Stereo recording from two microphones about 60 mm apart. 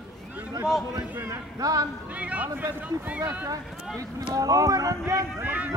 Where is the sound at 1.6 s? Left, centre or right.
Right.